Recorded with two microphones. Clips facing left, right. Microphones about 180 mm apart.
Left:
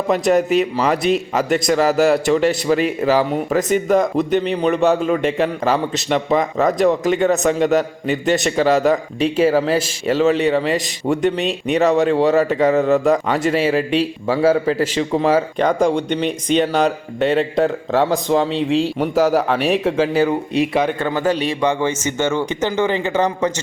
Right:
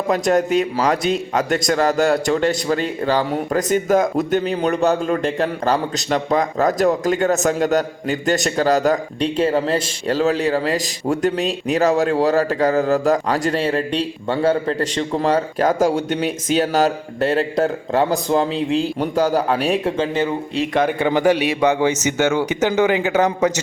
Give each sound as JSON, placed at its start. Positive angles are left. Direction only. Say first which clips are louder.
{"t": 0.1, "sound": "speech", "louder": "left 1 dB", "side_deg": 0}
{"t": 20.5, "sound": "speech", "louder": "left 4 dB", "side_deg": 15}
{"t": 21.0, "sound": "a man's voice", "louder": "right 3 dB", "side_deg": -15}